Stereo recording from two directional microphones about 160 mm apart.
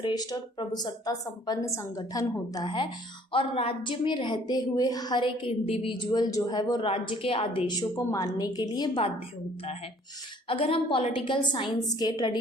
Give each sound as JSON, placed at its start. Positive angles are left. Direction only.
{"t": 0.0, "sound": "a woman's voice", "side_deg": 25}
{"t": 10.5, "sound": "a woman's voice", "side_deg": 35}